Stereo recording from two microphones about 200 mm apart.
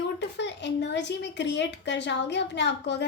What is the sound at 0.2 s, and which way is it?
Speech, 60° left (ahead or behind).